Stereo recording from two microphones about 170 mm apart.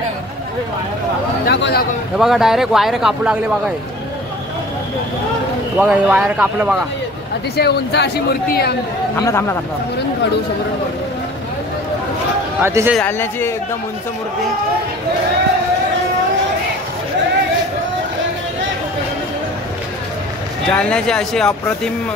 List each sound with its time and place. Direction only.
1.4 s a woman's voice: 80° left
2.1 s speech: centre (ahead or behind)
5.8 s speech: 10° right (ahead or behind)
7.5 s a woman's voice: 80° left
9.1 s a man's voice: 15° left (ahead or behind)
12.6 s speech: 15° right (ahead or behind)
13.0 s a man's voice: 10° left (ahead or behind)
20.7 s speech: 5° left (ahead or behind)